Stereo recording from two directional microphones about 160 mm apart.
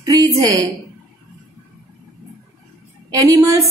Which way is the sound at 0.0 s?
20° right (ahead or behind).